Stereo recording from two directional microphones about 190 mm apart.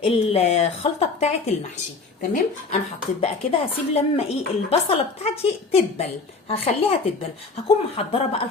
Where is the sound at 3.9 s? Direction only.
30° left (ahead or behind).